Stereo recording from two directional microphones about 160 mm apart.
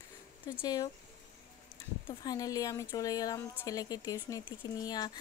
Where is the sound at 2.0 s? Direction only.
25° left (ahead or behind).